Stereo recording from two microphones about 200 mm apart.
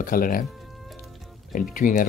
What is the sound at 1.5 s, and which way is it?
Speech, 40° left (ahead or behind).